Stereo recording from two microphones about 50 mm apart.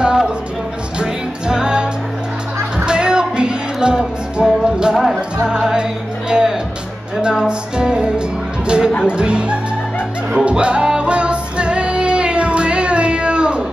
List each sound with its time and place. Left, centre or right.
0.0 s music: centre
1.5 s music: centre
4.9 s music: centre